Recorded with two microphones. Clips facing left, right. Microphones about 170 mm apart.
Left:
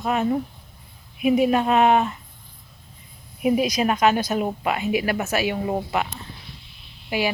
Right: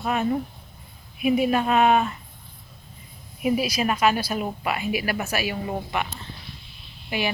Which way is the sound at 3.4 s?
20° left (ahead or behind).